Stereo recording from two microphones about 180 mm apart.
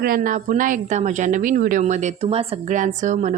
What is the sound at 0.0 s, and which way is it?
Speech, 50° right (ahead or behind).